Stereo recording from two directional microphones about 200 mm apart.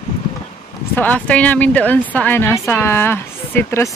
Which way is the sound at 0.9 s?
10° left (ahead or behind).